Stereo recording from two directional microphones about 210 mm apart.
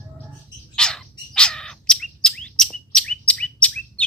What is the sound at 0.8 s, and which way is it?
Bird, 5° left (ahead or behind).